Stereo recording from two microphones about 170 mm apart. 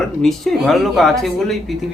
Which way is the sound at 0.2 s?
Centre (ahead or behind).